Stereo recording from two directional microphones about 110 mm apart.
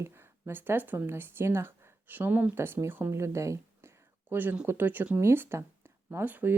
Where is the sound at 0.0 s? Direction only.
20° right (ahead or behind).